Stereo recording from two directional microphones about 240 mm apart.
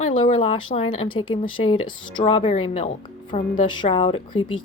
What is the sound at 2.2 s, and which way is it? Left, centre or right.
Speech, left.